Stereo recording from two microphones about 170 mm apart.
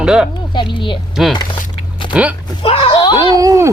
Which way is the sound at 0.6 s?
30° left (ahead or behind).